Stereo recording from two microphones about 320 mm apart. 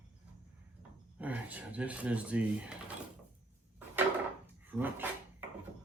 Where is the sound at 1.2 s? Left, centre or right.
Centre.